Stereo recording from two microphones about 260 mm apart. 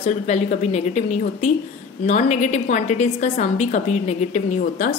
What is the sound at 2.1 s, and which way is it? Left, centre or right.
A woman's voice, left.